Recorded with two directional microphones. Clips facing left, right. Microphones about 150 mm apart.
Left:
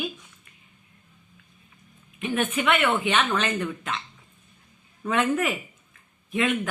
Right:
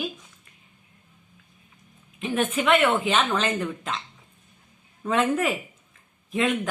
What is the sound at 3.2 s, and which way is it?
Speech, 35° right (ahead or behind).